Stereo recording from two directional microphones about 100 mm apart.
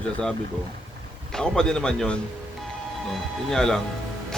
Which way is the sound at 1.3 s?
5° left (ahead or behind).